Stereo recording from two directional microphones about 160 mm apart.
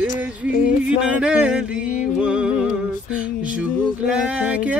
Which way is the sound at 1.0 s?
5° right (ahead or behind).